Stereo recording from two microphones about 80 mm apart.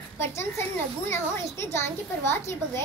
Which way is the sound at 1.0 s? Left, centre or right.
Left.